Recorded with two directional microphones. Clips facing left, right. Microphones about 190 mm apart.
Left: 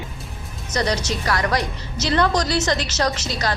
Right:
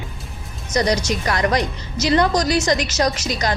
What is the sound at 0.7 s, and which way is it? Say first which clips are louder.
A woman's voice: right 3 dB; 15° right (ahead or behind).